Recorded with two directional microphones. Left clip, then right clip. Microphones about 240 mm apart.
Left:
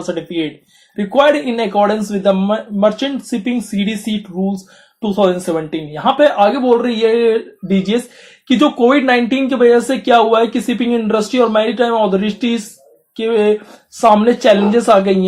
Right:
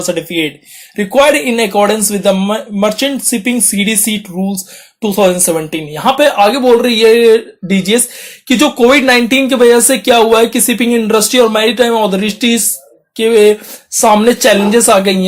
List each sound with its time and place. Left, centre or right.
0.0 s speech: right